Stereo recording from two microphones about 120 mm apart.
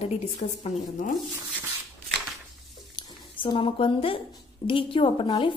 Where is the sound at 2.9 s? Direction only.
40° left (ahead or behind).